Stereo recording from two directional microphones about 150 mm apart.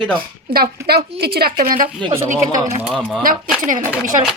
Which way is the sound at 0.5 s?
90° right.